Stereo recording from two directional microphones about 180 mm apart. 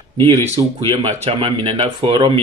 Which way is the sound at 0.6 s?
25° right (ahead or behind).